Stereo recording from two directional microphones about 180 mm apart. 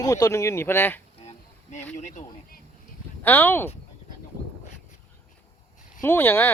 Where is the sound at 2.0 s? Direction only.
45° left (ahead or behind).